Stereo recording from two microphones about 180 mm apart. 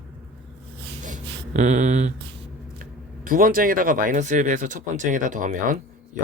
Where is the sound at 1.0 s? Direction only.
40° right (ahead or behind).